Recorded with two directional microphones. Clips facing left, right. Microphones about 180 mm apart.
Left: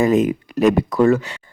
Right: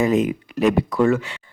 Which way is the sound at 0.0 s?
45° left (ahead or behind).